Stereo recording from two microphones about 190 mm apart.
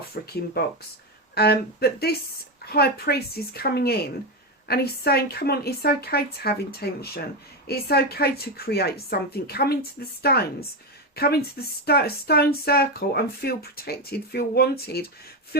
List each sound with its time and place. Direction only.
0.1 s speech: 55° left (ahead or behind)
1.4 s speech: 55° left (ahead or behind)